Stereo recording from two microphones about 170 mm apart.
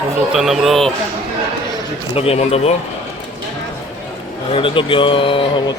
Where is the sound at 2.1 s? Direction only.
35° left (ahead or behind).